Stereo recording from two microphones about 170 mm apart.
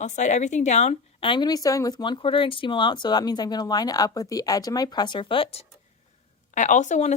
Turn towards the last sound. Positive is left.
turn(degrees=45)  # may be behind; listen again after turning